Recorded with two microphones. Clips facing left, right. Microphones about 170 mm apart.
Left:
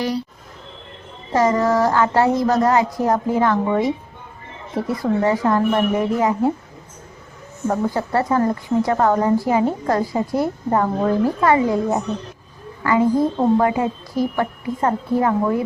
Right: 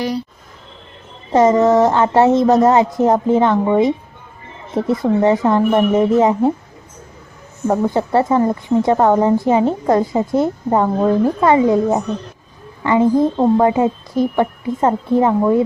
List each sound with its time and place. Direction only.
1.3 s a woman's voice: 20° right (ahead or behind)
7.7 s a woman's voice: 20° right (ahead or behind)